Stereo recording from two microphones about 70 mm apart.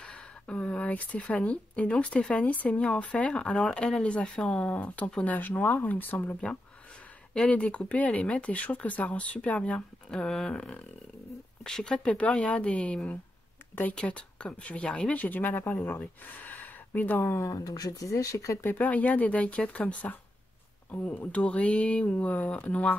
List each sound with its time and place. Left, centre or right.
0.0 s speech: centre
17.4 s speech: left
18.6 s speech: left